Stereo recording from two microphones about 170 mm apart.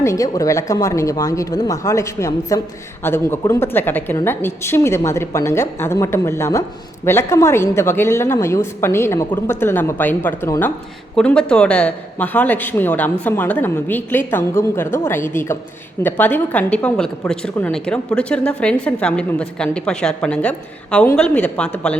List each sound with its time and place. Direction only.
0.0 s a woman's voice: 20° left (ahead or behind)